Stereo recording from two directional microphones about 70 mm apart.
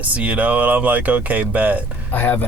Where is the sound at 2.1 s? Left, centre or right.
Left.